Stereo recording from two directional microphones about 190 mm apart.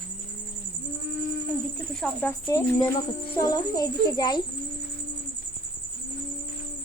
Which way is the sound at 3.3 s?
20° left (ahead or behind).